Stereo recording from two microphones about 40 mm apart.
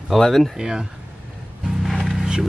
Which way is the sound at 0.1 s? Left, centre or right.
Centre.